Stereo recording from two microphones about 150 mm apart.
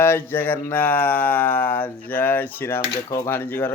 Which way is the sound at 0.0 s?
15° left (ahead or behind).